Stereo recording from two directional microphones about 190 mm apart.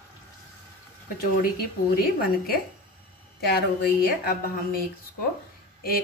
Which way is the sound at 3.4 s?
55° left (ahead or behind).